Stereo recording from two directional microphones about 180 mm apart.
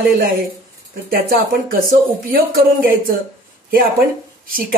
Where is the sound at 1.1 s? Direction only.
55° right (ahead or behind).